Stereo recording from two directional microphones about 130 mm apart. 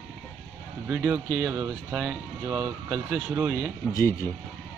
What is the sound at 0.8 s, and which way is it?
Speech, 10° right (ahead or behind).